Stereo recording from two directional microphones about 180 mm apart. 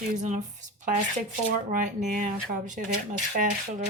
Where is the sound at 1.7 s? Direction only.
45° right (ahead or behind).